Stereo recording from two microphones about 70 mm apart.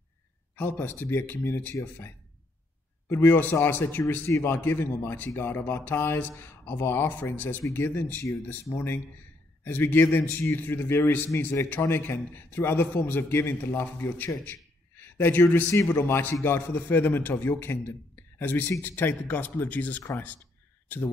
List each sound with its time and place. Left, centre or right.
0.6 s a man's voice: left
3.1 s speech: left
4.3 s a man's voice: left
4.6 s a man's voice: left